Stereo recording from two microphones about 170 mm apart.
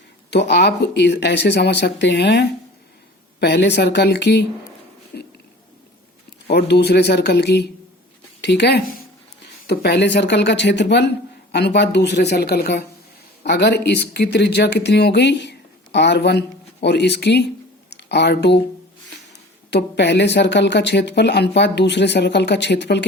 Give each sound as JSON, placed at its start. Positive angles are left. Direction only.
{"t": 0.3, "sound": "speech", "side_deg": 85}
{"t": 5.1, "sound": "a sound", "side_deg": 70}
{"t": 6.5, "sound": "speech", "side_deg": 75}
{"t": 19.7, "sound": "speech", "side_deg": 90}